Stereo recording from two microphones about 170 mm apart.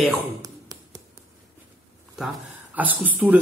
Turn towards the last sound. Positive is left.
turn(degrees=-10)  # may be behind; listen again after turning